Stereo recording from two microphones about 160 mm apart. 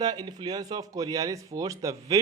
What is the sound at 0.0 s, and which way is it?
Speech, 25° right (ahead or behind).